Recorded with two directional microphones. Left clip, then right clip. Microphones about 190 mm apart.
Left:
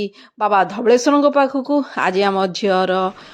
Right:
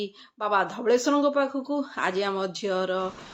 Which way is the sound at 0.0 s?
45° left (ahead or behind).